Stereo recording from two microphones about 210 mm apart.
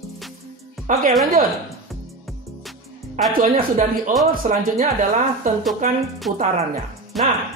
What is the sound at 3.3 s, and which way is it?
Speech, 40° right (ahead or behind).